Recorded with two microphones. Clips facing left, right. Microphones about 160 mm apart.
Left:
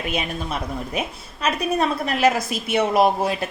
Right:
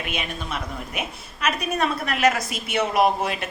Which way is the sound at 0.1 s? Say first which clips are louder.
Left 5 dB; 35° left (ahead or behind).